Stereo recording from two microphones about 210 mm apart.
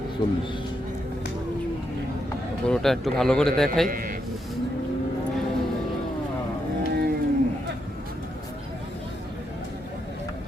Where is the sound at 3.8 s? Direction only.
40° right (ahead or behind).